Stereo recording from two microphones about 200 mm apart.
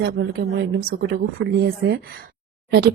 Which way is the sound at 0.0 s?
55° right (ahead or behind).